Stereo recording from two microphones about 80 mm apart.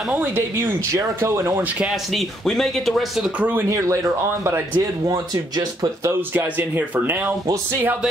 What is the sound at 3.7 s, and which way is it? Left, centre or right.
Speech, right.